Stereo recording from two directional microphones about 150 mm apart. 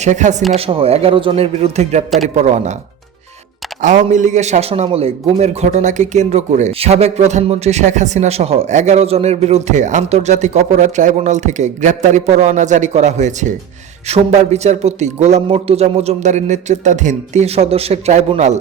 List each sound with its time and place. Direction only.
0.0 s a man's voice: 50° right (ahead or behind)
0.5 s speech: 40° right (ahead or behind)
2.0 s speech: centre (ahead or behind)
2.3 s a man's voice: 45° right (ahead or behind)
3.8 s a man's voice: 55° right (ahead or behind)